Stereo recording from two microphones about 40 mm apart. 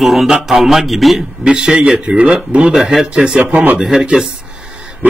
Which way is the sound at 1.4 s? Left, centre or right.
Right.